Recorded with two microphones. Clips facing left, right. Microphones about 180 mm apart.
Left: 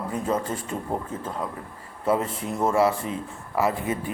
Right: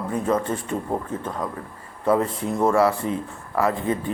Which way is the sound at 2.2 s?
35° right (ahead or behind).